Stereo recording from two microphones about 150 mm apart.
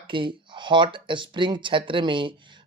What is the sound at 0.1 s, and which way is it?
Speech, 30° right (ahead or behind).